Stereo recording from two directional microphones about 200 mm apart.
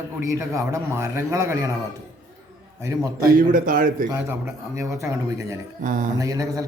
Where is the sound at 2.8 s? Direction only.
15° right (ahead or behind).